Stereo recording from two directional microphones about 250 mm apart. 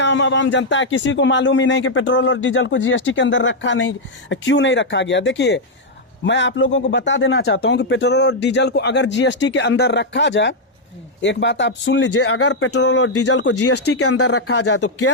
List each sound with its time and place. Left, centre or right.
0.0 s speech: left
13.6 s speech: left